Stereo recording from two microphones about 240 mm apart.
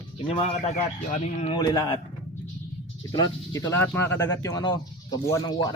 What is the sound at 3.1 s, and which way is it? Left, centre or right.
Speech, centre.